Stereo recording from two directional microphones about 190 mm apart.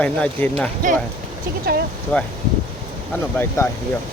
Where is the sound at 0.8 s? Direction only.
45° right (ahead or behind).